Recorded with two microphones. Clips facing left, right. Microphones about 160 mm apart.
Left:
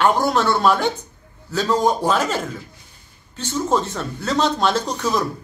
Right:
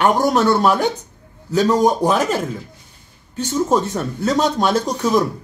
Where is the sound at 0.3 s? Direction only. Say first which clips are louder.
Right 2 dB; 10° right (ahead or behind).